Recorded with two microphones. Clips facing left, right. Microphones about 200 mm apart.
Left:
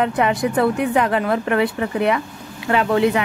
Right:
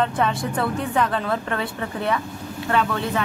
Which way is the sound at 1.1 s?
70° left (ahead or behind).